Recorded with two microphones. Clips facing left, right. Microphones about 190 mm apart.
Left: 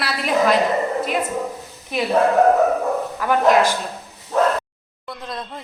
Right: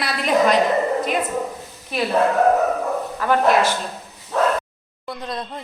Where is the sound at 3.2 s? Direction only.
15° left (ahead or behind).